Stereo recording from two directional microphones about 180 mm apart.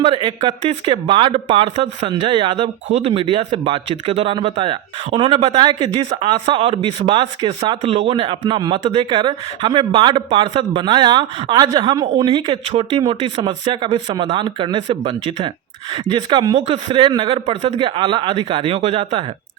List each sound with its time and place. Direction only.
0.0 s speech: 30° right (ahead or behind)
0.6 s a man's voice: 40° right (ahead or behind)
1.0 s a man's voice: 30° right (ahead or behind)